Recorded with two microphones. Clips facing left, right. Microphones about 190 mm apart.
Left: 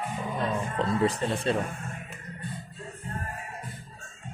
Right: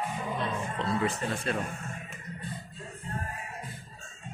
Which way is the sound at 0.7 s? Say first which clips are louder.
Left 4 dB; 35° left (ahead or behind).